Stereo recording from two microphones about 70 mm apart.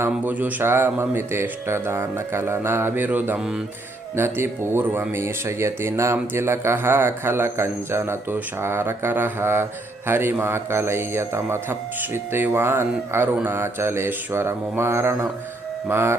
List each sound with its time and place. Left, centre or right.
0.3 s a sound: right
0.6 s speech: right
4.1 s speech: right